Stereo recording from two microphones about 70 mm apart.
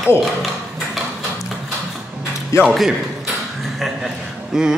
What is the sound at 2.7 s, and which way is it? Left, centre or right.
Speech, centre.